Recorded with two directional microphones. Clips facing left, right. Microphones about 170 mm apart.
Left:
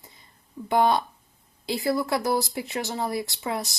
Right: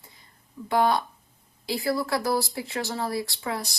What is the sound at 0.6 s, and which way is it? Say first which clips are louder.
A woman's voice: left 1 dB; 20° left (ahead or behind).